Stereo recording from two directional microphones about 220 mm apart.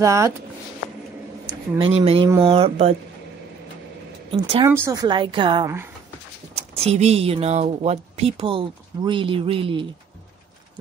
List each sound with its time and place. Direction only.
0.0 s speech: 15° right (ahead or behind)
1.4 s speech: 20° right (ahead or behind)
2.2 s speech: 15° right (ahead or behind)
2.5 s speech: 25° right (ahead or behind)
4.3 s speech: 25° right (ahead or behind)
4.6 s speech: 10° right (ahead or behind)